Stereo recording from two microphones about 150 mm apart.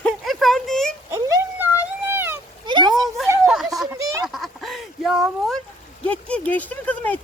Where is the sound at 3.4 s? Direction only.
Centre (ahead or behind).